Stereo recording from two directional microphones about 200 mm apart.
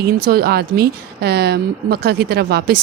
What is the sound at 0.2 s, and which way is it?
Speech, 50° right (ahead or behind).